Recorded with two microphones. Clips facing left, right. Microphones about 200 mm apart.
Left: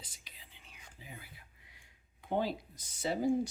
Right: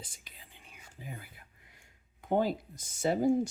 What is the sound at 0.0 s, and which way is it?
Whispering, 50° right (ahead or behind).